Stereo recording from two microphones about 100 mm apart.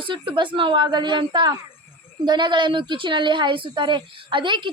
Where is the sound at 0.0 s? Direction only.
55° right (ahead or behind).